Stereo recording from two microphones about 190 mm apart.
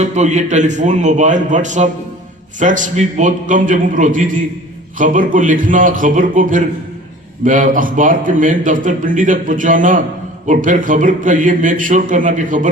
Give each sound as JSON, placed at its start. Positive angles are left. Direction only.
{"t": 0.0, "sound": "a man's voice", "side_deg": -35}